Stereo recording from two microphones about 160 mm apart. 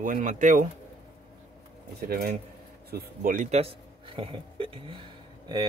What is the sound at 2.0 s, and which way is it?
Speech, 75° right (ahead or behind).